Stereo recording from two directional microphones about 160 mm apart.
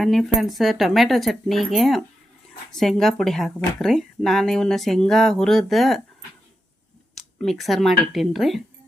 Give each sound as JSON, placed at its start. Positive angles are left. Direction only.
{"t": 0.0, "sound": "speech", "side_deg": 0}
{"t": 7.2, "sound": "speech", "side_deg": 0}